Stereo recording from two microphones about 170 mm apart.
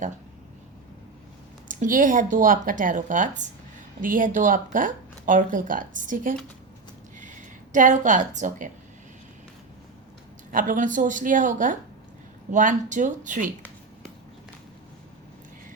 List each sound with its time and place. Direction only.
1.6 s speech: 50° right (ahead or behind)
10.5 s speech: 50° right (ahead or behind)